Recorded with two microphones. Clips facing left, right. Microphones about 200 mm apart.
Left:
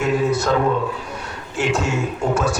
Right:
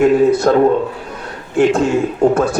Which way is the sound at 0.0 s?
55° right (ahead or behind).